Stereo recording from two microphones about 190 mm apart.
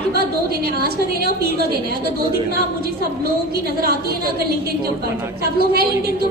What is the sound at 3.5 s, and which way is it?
A woman's voice, 55° right (ahead or behind).